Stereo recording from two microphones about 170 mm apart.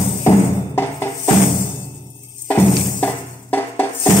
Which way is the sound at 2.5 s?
10° left (ahead or behind).